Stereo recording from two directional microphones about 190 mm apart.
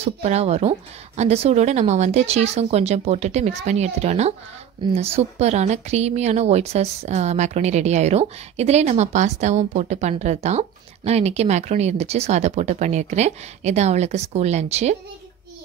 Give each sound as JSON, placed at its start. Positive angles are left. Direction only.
{"t": 0.0, "sound": "speech", "side_deg": -35}